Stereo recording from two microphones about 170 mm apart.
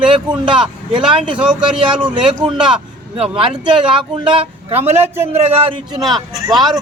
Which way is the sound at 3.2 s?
30° right (ahead or behind).